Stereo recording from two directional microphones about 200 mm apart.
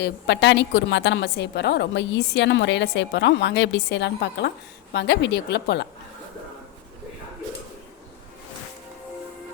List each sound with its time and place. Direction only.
0.0 s a woman's voice: 60° left (ahead or behind)